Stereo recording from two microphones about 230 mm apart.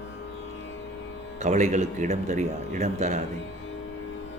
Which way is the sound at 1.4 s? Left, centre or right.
Right.